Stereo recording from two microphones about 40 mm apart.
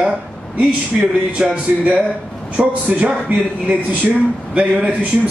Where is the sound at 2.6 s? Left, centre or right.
Right.